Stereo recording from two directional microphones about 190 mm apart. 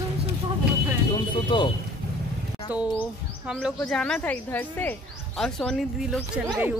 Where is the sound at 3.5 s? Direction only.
5° left (ahead or behind).